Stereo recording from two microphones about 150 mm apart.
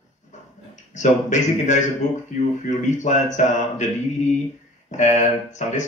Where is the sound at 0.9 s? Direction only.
55° left (ahead or behind).